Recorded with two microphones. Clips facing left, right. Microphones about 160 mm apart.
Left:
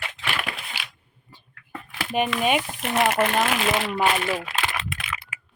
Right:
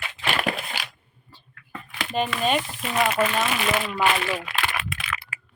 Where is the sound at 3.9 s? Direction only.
25° left (ahead or behind).